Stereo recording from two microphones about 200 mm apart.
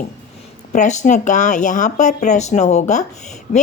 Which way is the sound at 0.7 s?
40° left (ahead or behind).